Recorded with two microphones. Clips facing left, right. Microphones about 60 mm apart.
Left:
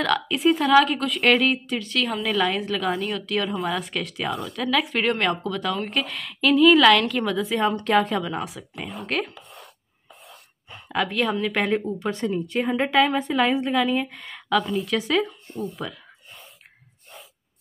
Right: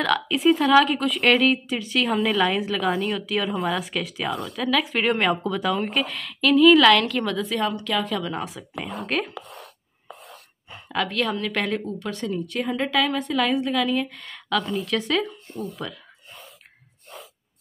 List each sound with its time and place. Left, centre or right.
0.0 s a woman's voice: centre
7.7 s a woman's voice: left
8.2 s a woman's voice: centre
9.4 s a sound: centre
10.2 s a woman's voice: centre
15.6 s a sound: centre